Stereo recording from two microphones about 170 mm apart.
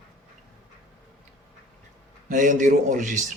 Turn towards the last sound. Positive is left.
turn(degrees=-50)  # may be behind; listen again after turning